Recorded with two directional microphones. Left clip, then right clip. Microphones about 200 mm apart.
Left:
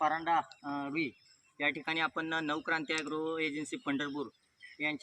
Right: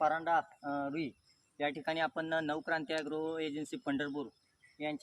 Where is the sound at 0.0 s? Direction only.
45° right (ahead or behind).